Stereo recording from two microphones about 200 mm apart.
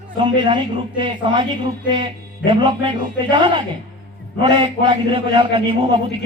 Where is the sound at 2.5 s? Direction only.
25° right (ahead or behind).